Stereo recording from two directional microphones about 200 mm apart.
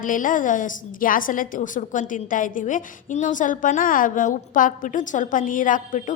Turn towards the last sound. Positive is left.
turn(degrees=40)  # may be behind; listen again after turning